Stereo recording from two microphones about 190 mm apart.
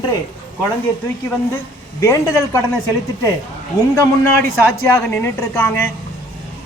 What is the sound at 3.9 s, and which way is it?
Speech, 15° left (ahead or behind).